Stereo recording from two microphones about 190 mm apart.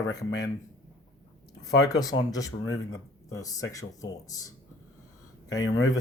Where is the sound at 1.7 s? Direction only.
20° left (ahead or behind).